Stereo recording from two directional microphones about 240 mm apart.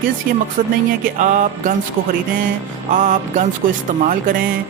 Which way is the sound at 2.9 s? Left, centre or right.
Right.